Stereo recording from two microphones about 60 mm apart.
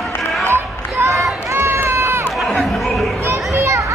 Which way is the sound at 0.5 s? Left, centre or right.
Right.